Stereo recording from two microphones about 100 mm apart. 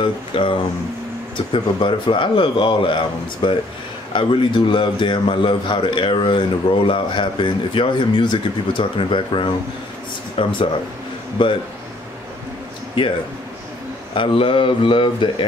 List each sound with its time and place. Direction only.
0.0 s a man's voice: 60° left (ahead or behind)
11.4 s a man's voice: 55° left (ahead or behind)
14.1 s a man's voice: 60° left (ahead or behind)